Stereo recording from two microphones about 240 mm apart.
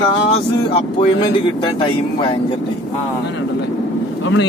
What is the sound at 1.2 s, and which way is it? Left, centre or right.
Speech, centre.